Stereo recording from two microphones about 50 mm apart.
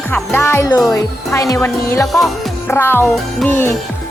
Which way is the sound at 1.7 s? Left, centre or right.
Left.